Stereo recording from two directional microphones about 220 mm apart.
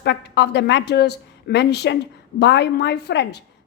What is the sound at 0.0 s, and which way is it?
A woman's voice, 50° left (ahead or behind).